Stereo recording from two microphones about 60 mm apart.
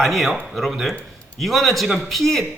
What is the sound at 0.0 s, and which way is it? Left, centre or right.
A man's voice, centre.